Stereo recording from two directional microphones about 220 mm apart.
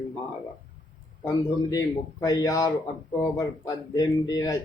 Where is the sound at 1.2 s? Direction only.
15° left (ahead or behind).